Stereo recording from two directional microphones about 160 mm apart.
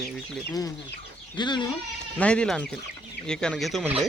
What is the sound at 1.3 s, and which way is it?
Speech, 30° left (ahead or behind).